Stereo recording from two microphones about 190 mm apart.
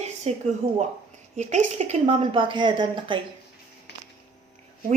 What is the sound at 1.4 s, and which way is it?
A woman's voice, 40° right (ahead or behind).